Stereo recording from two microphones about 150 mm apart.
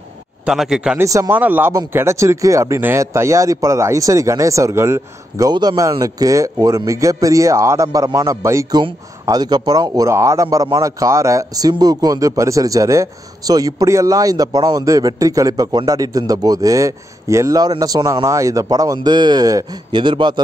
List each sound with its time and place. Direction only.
0.5 s speech: 5° right (ahead or behind)
0.9 s a man's voice: 20° right (ahead or behind)